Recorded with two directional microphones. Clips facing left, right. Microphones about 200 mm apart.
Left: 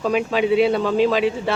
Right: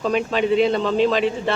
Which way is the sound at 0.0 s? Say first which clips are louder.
Left 1 dB; 5° left (ahead or behind).